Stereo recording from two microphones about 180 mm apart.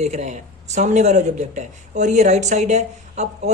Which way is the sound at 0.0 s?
40° right (ahead or behind).